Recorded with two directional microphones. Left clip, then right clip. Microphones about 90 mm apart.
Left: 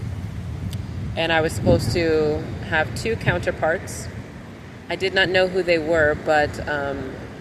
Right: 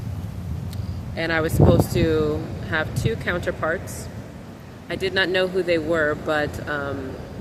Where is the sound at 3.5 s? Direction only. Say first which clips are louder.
Left 3 dB; 15° right (ahead or behind).